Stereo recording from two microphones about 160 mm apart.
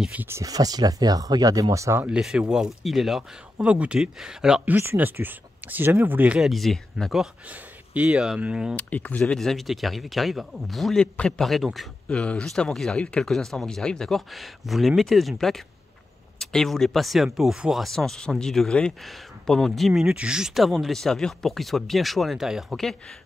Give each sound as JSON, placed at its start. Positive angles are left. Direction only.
{"t": 0.0, "sound": "speech", "side_deg": -10}
{"t": 2.0, "sound": "speech", "side_deg": -5}
{"t": 8.7, "sound": "speech", "side_deg": 10}